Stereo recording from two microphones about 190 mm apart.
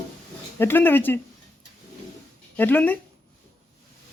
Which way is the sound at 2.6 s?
10° left (ahead or behind).